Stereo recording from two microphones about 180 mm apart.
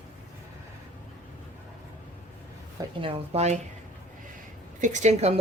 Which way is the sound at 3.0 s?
35° right (ahead or behind).